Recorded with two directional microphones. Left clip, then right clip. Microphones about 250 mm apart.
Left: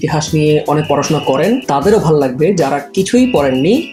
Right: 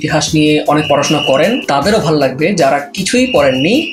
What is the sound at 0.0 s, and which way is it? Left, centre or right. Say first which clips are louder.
Speech: right 2 dB; left.